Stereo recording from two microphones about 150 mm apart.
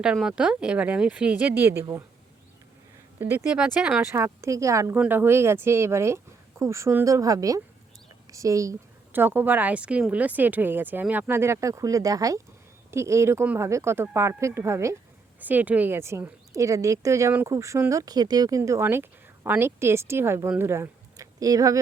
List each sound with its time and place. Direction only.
0.0 s speech: 5° right (ahead or behind)
3.2 s speech: 10° right (ahead or behind)
4.0 s speech: 20° right (ahead or behind)